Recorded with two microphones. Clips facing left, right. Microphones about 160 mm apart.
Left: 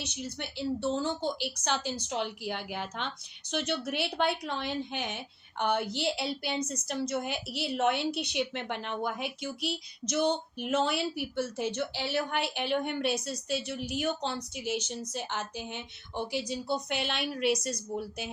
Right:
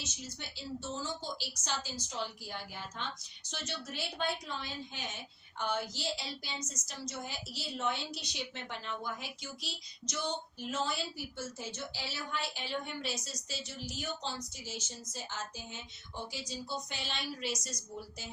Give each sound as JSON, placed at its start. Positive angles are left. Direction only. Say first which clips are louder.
{"t": 0.0, "sound": "a woman's voice", "louder": "left 7 dB", "side_deg": 65}